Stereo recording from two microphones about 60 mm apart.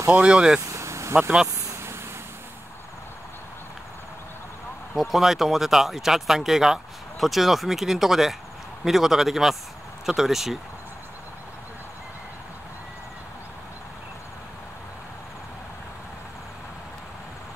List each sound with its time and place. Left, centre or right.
0.1 s speech: centre
0.6 s vehicle: right
4.9 s speech: centre